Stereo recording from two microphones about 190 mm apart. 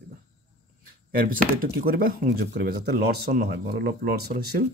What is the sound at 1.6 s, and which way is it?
Speech, 50° right (ahead or behind).